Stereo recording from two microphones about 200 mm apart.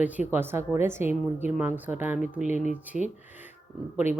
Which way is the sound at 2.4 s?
35° left (ahead or behind).